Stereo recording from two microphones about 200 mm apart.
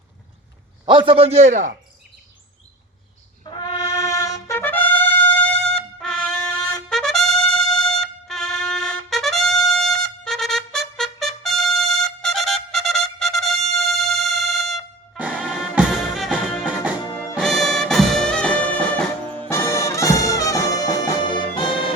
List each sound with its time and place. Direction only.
0.9 s a man's voice: 25° right (ahead or behind)
3.4 s brass instrument: 25° left (ahead or behind)
5.5 s trumpet: 5° left (ahead or behind)
17.3 s music: centre (ahead or behind)
19.5 s brass instrument: 15° left (ahead or behind)
21.2 s music: 25° left (ahead or behind)